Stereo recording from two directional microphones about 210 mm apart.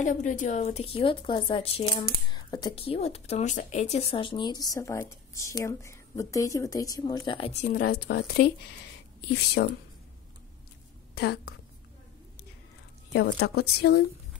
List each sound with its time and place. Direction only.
0.0 s speech: 35° left (ahead or behind)
7.6 s speech: 40° left (ahead or behind)
9.5 s speech: 55° left (ahead or behind)
11.1 s speech: 50° left (ahead or behind)
13.1 s speech: 55° left (ahead or behind)